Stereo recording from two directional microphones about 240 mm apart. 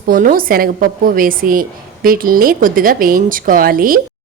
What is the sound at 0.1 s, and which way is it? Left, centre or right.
Speech, right.